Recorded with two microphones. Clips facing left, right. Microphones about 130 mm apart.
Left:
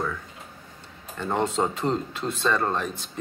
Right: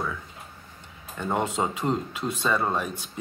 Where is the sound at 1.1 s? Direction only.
10° right (ahead or behind).